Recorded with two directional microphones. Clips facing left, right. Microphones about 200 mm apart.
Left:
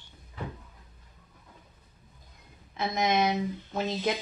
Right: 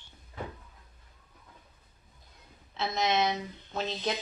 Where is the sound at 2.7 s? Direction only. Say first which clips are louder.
Left 2 dB; 15° left (ahead or behind).